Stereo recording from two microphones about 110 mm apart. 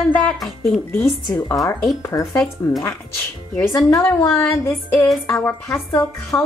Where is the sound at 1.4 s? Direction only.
30° left (ahead or behind).